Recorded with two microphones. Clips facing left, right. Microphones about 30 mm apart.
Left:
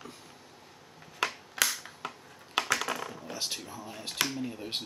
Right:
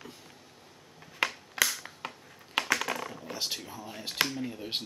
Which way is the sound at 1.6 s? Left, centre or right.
Centre.